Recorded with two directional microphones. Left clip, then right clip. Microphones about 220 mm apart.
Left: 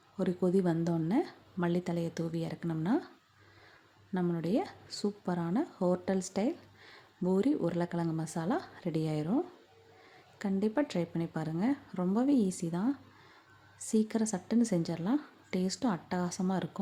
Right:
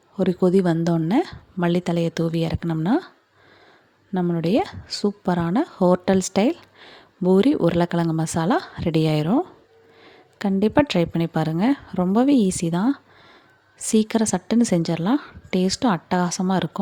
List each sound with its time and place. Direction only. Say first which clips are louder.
0.2 s a woman's voice: right 11 dB; 35° right (ahead or behind)
4.1 s a woman's voice: right 11 dB; 35° right (ahead or behind)